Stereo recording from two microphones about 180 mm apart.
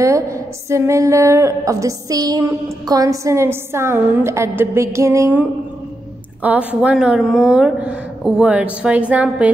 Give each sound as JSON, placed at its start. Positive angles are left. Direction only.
{"t": 0.0, "sound": "a woman's voice", "side_deg": -15}